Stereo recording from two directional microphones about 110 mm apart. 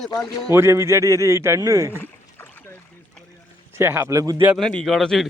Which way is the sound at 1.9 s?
20° left (ahead or behind).